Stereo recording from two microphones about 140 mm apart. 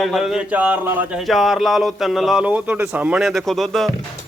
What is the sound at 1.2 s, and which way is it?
A man's voice, centre (ahead or behind).